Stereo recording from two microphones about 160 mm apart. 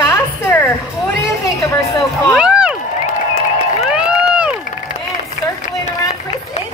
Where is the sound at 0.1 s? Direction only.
15° left (ahead or behind).